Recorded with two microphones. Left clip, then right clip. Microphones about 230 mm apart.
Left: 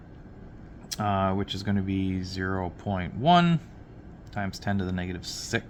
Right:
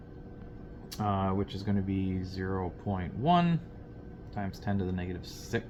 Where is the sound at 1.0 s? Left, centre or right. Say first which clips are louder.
Left 5 dB; left.